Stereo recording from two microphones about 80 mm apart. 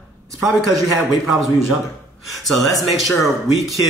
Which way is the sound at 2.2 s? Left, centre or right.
Centre.